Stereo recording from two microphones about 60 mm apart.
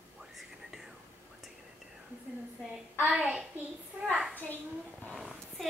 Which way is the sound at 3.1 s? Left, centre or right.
Centre.